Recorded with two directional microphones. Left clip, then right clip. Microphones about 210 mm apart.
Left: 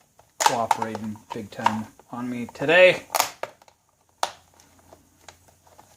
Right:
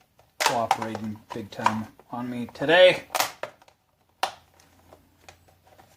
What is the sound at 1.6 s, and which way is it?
Speech, 25° left (ahead or behind).